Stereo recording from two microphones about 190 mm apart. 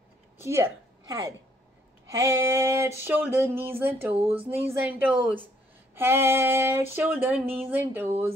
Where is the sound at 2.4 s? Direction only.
15° right (ahead or behind).